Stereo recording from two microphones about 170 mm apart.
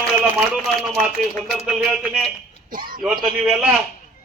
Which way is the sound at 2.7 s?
55° right (ahead or behind).